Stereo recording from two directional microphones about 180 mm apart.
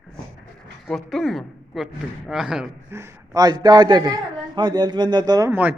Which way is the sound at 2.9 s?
20° right (ahead or behind).